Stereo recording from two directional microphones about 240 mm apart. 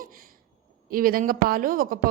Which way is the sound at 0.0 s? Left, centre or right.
Right.